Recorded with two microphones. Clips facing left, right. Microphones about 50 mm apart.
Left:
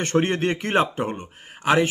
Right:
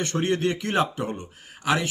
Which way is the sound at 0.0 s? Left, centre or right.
Left.